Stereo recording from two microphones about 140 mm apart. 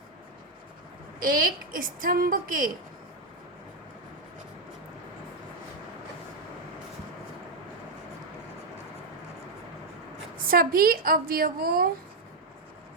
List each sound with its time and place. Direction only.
1.2 s speech: 90° right
10.3 s speech: 90° right